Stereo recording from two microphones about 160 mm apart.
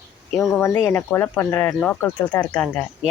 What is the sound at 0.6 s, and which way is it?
Speech, 15° left (ahead or behind).